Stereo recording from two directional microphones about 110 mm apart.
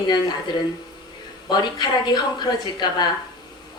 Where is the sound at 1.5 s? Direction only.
40° left (ahead or behind).